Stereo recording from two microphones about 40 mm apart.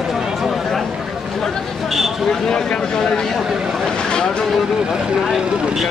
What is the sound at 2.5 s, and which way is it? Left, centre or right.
Speech, centre.